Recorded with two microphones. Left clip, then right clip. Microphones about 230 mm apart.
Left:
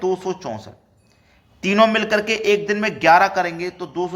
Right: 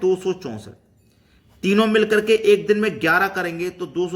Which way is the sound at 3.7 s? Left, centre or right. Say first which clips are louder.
Right 1 dB; right.